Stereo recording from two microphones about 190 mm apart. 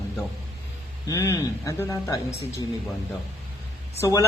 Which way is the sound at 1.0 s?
15° left (ahead or behind).